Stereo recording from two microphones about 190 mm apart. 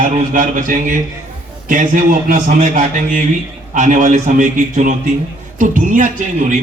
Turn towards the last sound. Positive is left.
turn(degrees=-40)  # may be behind; listen again after turning